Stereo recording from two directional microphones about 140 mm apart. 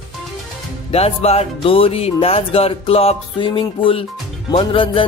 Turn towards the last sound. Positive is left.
turn(degrees=40)  # may be behind; listen again after turning